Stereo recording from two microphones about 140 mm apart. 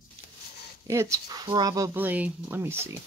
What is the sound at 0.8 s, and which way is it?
Speech, 20° right (ahead or behind).